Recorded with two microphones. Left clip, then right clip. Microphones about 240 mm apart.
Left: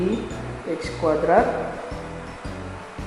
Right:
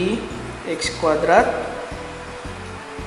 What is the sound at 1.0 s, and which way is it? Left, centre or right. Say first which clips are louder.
Speech: right 3 dB; centre.